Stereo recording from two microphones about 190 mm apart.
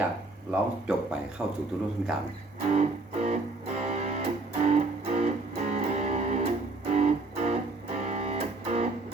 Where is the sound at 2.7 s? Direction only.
35° right (ahead or behind).